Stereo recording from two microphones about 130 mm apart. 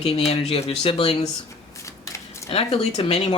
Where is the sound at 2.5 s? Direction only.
50° left (ahead or behind).